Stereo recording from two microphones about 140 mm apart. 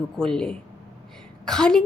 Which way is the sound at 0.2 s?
5° left (ahead or behind).